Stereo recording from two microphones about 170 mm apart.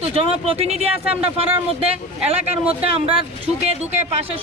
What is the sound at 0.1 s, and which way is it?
Speech, 35° right (ahead or behind).